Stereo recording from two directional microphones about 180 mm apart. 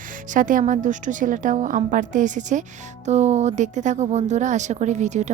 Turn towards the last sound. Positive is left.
turn(degrees=-40)  # may be behind; listen again after turning